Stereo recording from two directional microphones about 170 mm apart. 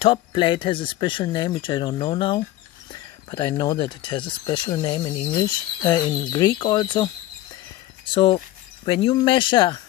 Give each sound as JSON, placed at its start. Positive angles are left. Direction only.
{"t": 0.0, "sound": "speech", "side_deg": 30}